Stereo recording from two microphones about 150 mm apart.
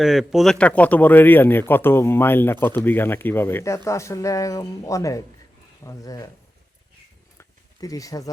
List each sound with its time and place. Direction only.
0.0 s speech: centre (ahead or behind)
0.6 s speech: 10° left (ahead or behind)
7.3 s a sound: 25° left (ahead or behind)